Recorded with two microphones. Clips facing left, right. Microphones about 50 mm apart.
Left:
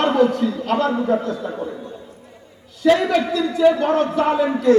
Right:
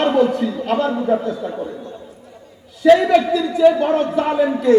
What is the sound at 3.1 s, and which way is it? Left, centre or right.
A man's voice, centre.